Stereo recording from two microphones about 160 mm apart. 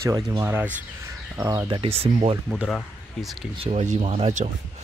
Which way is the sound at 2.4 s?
5° right (ahead or behind).